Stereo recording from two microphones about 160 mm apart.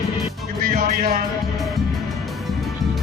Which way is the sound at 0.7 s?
65° right (ahead or behind).